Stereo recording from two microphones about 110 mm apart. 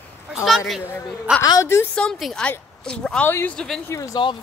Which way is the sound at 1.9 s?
5° left (ahead or behind).